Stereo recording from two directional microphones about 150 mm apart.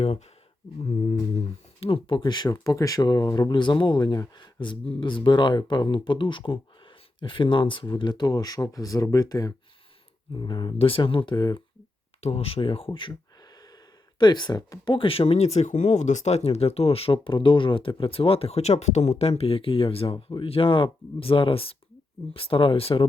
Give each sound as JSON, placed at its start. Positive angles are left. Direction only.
{"t": 0.8, "sound": "speech", "side_deg": 45}
{"t": 12.2, "sound": "speech", "side_deg": 45}
{"t": 14.2, "sound": "speech", "side_deg": 30}